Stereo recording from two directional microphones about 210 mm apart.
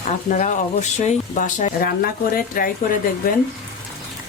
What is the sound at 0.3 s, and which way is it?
Speech, 35° left (ahead or behind).